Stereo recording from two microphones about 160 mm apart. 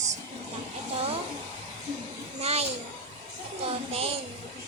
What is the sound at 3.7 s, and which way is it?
Speech, 40° right (ahead or behind).